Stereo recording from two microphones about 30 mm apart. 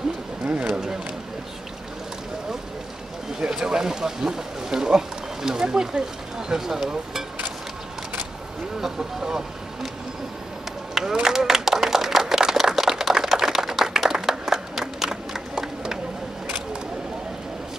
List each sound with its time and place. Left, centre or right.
3.3 s speech: right
6.5 s speech: centre
8.9 s speech: centre
11.2 s clapping: centre
15.5 s a sound: right